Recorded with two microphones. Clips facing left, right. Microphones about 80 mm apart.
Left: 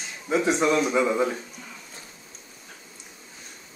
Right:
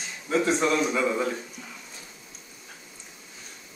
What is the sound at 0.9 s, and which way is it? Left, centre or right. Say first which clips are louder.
Speech: left 3 dB; centre.